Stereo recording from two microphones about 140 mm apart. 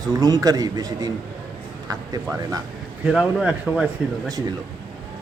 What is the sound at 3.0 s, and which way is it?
Speech, 5° right (ahead or behind).